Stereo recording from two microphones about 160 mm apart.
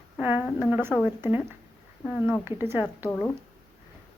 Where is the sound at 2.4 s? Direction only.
15° right (ahead or behind).